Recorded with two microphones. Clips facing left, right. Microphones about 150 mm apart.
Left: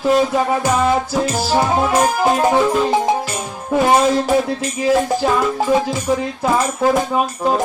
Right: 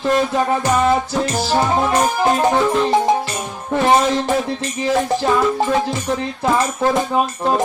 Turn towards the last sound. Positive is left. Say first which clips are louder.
# even
turn(degrees=0)  # may be behind; listen again after turning